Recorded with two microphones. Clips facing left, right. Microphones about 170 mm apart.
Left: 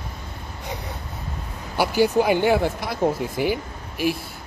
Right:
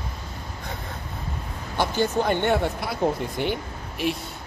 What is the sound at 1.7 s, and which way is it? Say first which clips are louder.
Speech: left 4 dB; 10° left (ahead or behind).